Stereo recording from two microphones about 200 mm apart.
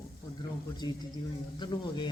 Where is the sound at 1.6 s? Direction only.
25° left (ahead or behind).